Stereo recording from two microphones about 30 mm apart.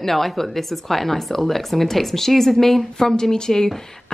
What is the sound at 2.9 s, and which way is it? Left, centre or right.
Speech, centre.